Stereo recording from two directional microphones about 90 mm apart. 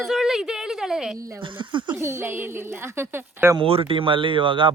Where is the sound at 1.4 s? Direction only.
65° right (ahead or behind).